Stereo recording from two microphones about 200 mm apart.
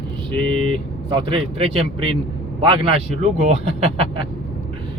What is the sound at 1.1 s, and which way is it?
A man's voice, 25° right (ahead or behind).